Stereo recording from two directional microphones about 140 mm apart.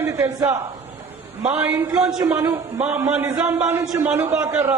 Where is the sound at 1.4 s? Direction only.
10° right (ahead or behind).